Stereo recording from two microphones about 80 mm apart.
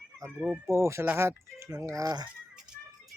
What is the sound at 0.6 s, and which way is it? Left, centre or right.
Speech, right.